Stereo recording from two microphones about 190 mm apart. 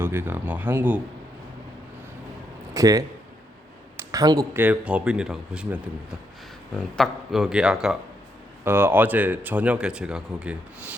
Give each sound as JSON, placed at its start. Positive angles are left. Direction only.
{"t": 0.0, "sound": "speech", "side_deg": -10}
{"t": 2.7, "sound": "speech", "side_deg": -20}